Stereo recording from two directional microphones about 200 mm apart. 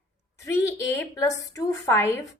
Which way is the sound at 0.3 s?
15° left (ahead or behind).